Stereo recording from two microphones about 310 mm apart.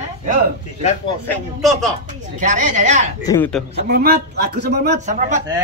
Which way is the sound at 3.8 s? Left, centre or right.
Right.